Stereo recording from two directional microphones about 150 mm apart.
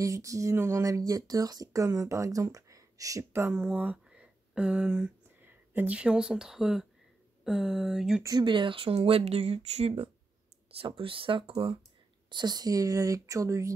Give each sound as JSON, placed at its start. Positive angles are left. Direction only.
{"t": 0.0, "sound": "speech", "side_deg": -20}
{"t": 7.4, "sound": "a sound", "side_deg": 0}
{"t": 8.2, "sound": "speech", "side_deg": -25}